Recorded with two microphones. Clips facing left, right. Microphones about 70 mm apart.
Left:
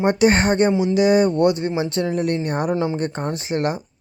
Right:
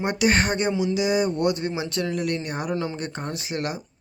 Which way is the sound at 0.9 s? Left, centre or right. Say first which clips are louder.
Left 7 dB; left.